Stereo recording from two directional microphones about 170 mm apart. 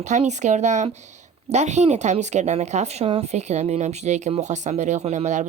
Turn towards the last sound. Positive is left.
turn(degrees=-45)  # may be behind; listen again after turning